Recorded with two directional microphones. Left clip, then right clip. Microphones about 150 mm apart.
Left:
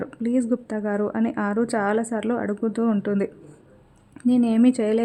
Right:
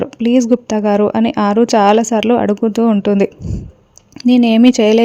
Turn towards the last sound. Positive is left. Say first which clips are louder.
# right 10 dB
turn(degrees=-40)  # may be behind; listen again after turning